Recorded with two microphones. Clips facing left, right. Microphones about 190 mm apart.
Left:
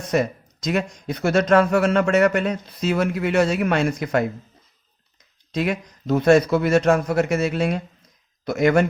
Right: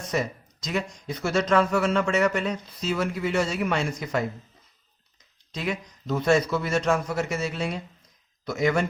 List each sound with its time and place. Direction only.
0.1 s speech: 60° left (ahead or behind)
5.5 s speech: 60° left (ahead or behind)